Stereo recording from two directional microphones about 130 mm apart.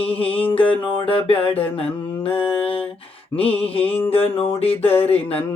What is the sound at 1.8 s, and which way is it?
Mantra, 45° left (ahead or behind).